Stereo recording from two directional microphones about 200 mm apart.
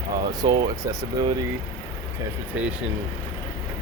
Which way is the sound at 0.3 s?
20° right (ahead or behind).